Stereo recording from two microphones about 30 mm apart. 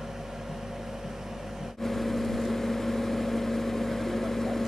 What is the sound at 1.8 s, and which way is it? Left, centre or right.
Vehicle, centre.